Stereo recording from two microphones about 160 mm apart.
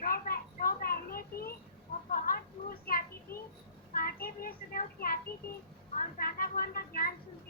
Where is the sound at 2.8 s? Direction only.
65° left (ahead or behind).